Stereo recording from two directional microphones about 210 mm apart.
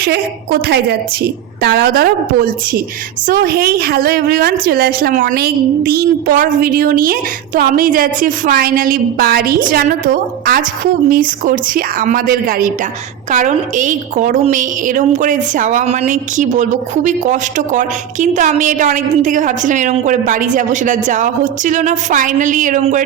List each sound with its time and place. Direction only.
0.0 s a woman's voice: 45° right (ahead or behind)